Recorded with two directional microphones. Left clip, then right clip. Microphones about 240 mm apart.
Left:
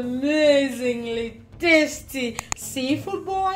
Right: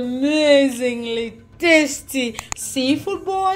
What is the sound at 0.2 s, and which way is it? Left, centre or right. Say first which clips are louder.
A woman's voice: right 4 dB; right.